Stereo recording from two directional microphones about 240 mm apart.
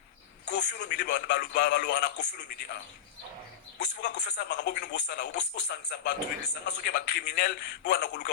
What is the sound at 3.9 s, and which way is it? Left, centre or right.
A man's voice, left.